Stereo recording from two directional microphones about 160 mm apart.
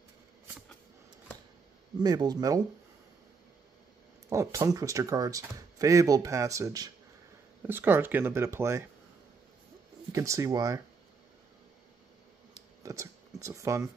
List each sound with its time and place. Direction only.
2.0 s speech: 25° right (ahead or behind)
4.3 s speech: 20° right (ahead or behind)
10.1 s speech: 20° right (ahead or behind)
12.8 s speech: 20° right (ahead or behind)